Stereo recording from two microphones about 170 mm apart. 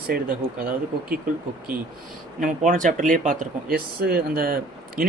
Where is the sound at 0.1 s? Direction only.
60° right (ahead or behind).